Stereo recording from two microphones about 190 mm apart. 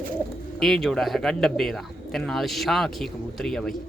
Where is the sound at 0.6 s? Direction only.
Centre (ahead or behind).